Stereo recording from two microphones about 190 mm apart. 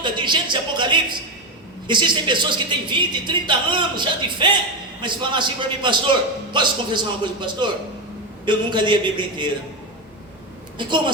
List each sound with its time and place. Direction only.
0.0 s speech: 25° right (ahead or behind)
10.8 s speech: 25° right (ahead or behind)